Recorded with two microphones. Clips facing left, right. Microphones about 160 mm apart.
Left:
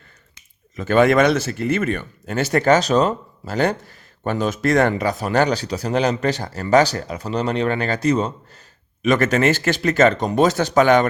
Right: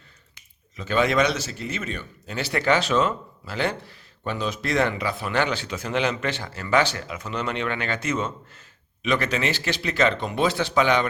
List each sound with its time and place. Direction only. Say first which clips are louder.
0.8 s speech: left 7 dB; 50° left (ahead or behind)